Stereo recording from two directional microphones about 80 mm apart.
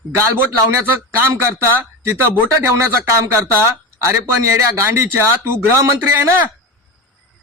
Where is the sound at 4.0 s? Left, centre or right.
Right.